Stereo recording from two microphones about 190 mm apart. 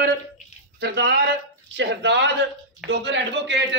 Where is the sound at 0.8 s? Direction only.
65° right (ahead or behind).